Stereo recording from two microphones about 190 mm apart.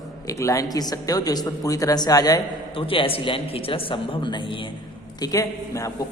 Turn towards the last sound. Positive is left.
turn(degrees=15)  # may be behind; listen again after turning